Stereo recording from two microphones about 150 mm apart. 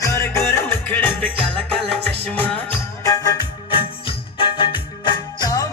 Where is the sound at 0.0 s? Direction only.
20° left (ahead or behind).